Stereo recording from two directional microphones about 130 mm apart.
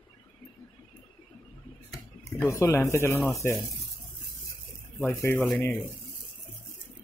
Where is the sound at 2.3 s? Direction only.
20° left (ahead or behind).